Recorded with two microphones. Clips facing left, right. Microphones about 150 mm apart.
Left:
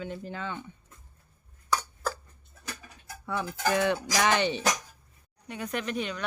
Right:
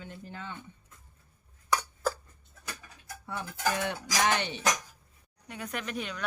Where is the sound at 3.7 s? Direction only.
90° left.